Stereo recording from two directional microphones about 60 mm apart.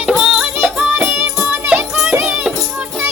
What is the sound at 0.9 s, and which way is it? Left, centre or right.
Music, right.